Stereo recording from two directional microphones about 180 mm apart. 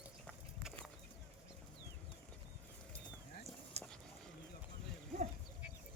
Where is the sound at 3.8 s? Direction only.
35° right (ahead or behind).